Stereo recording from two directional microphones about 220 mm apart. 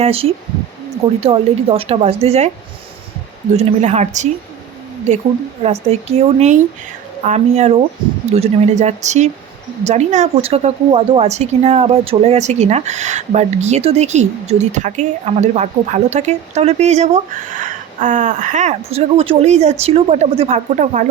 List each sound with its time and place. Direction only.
0.0 s a woman's voice: 25° right (ahead or behind)
3.5 s a woman's voice: 30° right (ahead or behind)
5.9 s a woman's voice: 30° right (ahead or behind)